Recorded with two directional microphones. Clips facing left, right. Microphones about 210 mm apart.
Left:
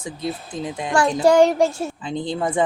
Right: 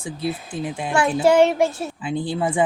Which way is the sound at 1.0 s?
10° right (ahead or behind).